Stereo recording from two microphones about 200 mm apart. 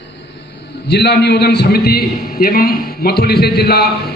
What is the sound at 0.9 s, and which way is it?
A man's voice, 55° left (ahead or behind).